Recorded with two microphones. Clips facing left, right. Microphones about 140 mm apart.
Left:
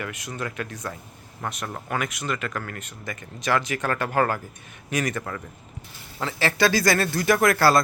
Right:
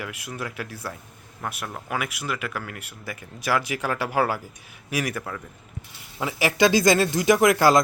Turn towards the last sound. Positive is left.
turn(degrees=-15)  # may be behind; listen again after turning